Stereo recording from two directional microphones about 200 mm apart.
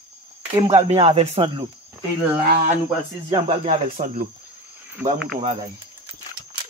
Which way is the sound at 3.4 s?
30° right (ahead or behind).